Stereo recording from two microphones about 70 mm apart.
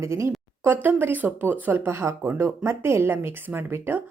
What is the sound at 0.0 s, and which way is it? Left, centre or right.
Speech, right.